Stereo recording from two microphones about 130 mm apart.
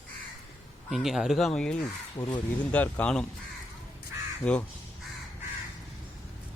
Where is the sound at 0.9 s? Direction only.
Centre (ahead or behind).